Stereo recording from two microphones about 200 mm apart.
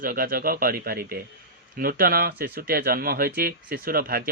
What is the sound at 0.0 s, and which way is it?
Speech, 45° right (ahead or behind).